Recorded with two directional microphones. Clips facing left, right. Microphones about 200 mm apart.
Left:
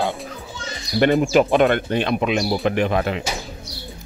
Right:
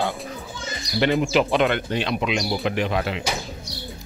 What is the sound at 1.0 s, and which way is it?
Speech, 50° left (ahead or behind).